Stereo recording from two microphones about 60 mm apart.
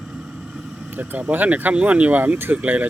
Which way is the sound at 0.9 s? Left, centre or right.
Right.